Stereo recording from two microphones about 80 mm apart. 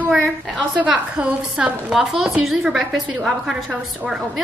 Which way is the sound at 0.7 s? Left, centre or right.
Centre.